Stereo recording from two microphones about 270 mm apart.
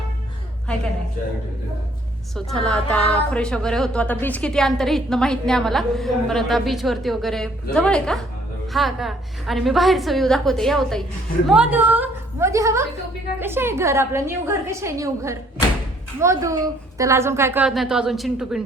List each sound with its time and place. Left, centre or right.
2.3 s a woman's voice: centre